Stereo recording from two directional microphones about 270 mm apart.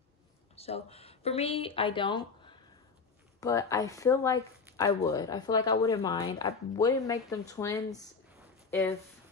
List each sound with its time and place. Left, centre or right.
0.6 s speech: left
3.3 s speech: centre
8.6 s a sound: centre